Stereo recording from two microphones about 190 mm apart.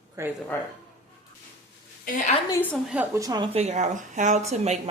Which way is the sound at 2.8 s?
5° right (ahead or behind).